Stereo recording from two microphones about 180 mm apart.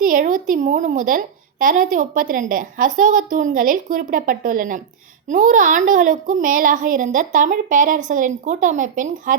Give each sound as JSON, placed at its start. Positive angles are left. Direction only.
{"t": 0.0, "sound": "a woman's voice", "side_deg": -50}